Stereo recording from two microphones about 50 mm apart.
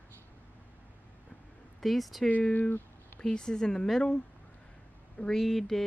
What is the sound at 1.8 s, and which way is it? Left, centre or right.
Speech, centre.